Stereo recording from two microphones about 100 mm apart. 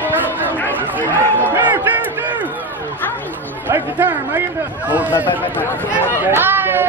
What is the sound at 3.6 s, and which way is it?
Speech, 20° right (ahead or behind).